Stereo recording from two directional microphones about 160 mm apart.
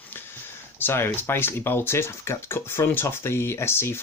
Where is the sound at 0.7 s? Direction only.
15° left (ahead or behind).